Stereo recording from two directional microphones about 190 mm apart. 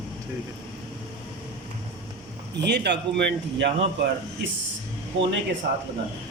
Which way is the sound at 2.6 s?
65° right (ahead or behind).